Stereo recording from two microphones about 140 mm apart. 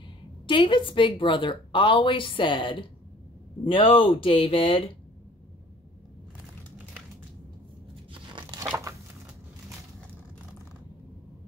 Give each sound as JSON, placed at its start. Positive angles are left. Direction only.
{"t": 0.5, "sound": "a woman's voice", "side_deg": 35}
{"t": 8.1, "sound": "crunch", "side_deg": -35}
{"t": 8.5, "sound": "a sound", "side_deg": -20}